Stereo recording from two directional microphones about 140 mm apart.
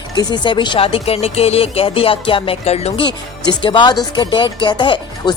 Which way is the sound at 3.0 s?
35° left (ahead or behind).